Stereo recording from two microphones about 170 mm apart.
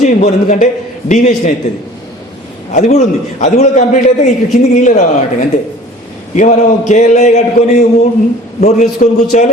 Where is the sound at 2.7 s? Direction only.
45° left (ahead or behind).